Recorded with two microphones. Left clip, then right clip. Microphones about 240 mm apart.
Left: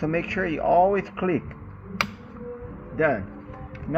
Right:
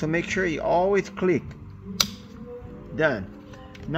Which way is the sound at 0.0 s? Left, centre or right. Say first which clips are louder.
Right 1 dB; right.